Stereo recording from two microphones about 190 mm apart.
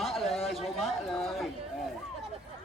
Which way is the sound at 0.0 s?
Centre (ahead or behind).